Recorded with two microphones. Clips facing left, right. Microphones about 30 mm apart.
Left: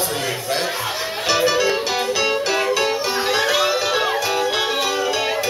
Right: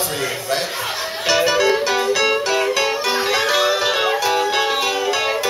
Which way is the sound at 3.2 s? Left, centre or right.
Centre.